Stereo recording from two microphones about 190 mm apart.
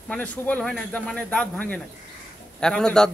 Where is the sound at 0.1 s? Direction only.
5° left (ahead or behind).